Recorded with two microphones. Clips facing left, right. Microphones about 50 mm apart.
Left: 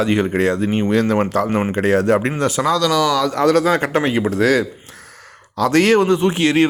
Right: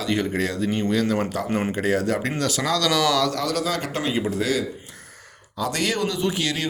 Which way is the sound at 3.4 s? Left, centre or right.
Left.